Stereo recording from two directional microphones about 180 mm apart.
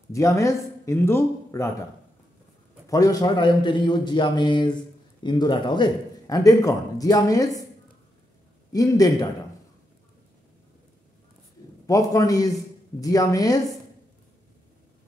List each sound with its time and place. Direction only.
0.1 s speech: 15° left (ahead or behind)
2.9 s speech: 20° left (ahead or behind)
8.7 s speech: 20° left (ahead or behind)
11.8 s speech: 20° left (ahead or behind)